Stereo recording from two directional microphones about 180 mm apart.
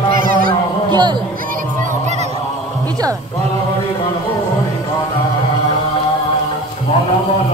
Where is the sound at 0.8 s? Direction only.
25° right (ahead or behind).